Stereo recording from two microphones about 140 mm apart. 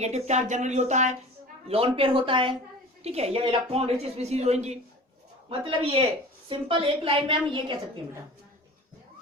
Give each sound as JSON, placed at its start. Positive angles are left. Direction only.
{"t": 0.0, "sound": "speech", "side_deg": -55}
{"t": 1.6, "sound": "a woman's voice", "side_deg": -45}
{"t": 5.5, "sound": "a woman's voice", "side_deg": -40}